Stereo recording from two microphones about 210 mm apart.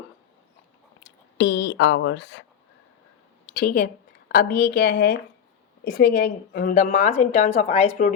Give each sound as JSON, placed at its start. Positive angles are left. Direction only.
{"t": 1.0, "sound": "speech", "side_deg": 55}
{"t": 3.4, "sound": "a woman's voice", "side_deg": 45}